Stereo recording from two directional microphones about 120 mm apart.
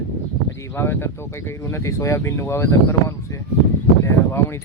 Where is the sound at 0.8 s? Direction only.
20° left (ahead or behind).